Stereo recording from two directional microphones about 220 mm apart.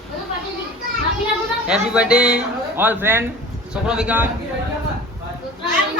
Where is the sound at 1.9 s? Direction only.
5° right (ahead or behind).